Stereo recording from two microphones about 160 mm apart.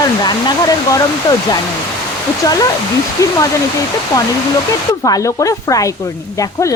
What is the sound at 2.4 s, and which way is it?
Speech, 25° left (ahead or behind).